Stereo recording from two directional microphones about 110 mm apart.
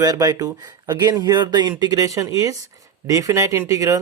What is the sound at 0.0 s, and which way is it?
Speech, 35° right (ahead or behind).